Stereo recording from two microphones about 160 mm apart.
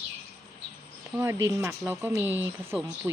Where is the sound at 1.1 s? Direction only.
15° right (ahead or behind).